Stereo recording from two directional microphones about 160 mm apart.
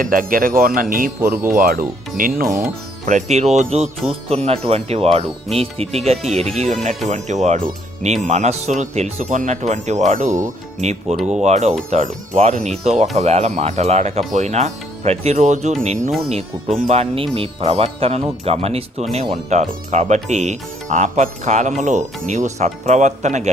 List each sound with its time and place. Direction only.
0.0 s speech: 60° right (ahead or behind)
2.5 s speech: 15° right (ahead or behind)
3.1 s speech: 45° right (ahead or behind)